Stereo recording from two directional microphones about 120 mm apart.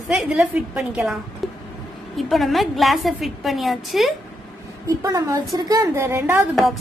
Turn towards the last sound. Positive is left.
turn(degrees=0)  # may be behind; listen again after turning